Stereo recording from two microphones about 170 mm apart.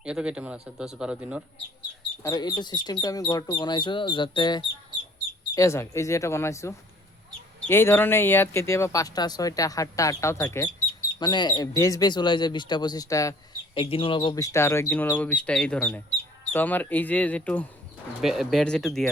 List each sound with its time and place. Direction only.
0.0 s a man's voice: 5° right (ahead or behind)
2.2 s speech: 20° left (ahead or behind)
13.7 s speech: 30° left (ahead or behind); by 17.7 s 10° left (ahead or behind)
18.2 s a man's voice: centre (ahead or behind)